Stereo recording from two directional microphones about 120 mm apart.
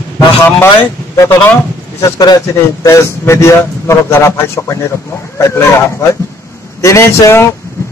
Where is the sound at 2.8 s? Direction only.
25° left (ahead or behind).